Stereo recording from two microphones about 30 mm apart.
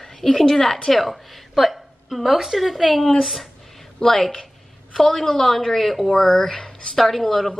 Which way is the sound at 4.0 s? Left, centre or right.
Centre.